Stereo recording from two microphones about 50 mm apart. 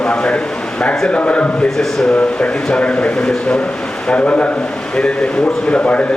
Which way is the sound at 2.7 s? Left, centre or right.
Left.